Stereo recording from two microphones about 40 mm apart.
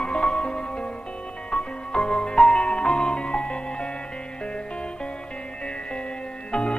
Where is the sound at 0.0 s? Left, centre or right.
Left.